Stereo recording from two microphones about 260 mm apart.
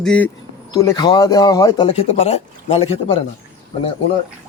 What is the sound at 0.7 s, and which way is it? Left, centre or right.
Speech, centre.